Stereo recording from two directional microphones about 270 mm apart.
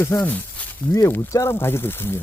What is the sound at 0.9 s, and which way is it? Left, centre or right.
Speech, centre.